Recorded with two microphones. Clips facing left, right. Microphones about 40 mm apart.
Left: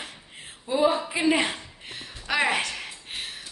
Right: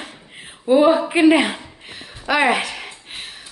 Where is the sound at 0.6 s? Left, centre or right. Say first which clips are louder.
Right 9 dB; right.